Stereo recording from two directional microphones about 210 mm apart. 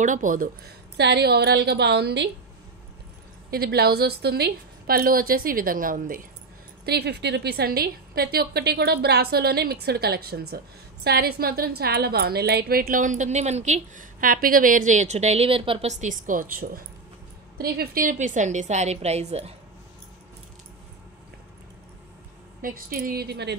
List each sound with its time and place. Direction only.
0.0 s a woman's voice: 40° right (ahead or behind)
0.9 s a woman's voice: 55° right (ahead or behind)
3.4 s a woman's voice: 45° right (ahead or behind)
6.9 s a woman's voice: 50° right (ahead or behind); by 19.5 s 30° right (ahead or behind)
22.6 s a woman's voice: 40° right (ahead or behind)